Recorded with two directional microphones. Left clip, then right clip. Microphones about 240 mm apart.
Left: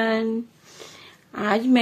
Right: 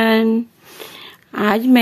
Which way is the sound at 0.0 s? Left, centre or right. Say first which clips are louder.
Right 8 dB; right.